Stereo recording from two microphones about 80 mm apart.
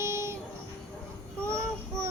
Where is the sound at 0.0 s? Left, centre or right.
Right.